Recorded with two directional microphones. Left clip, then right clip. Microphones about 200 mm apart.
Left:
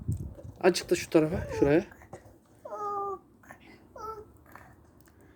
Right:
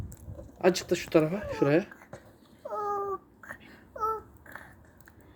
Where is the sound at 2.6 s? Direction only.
10° right (ahead or behind).